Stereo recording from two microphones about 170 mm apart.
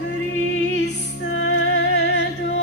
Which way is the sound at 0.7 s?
90° left.